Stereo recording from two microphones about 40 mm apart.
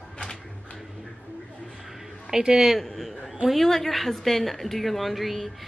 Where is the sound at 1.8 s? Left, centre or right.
Centre.